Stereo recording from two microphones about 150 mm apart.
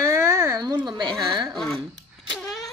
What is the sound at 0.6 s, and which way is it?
Speech, 30° right (ahead or behind).